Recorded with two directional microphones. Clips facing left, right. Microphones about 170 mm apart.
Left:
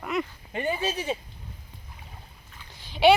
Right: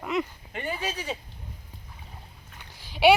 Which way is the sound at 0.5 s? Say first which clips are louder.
Left 4 dB; 25° left (ahead or behind).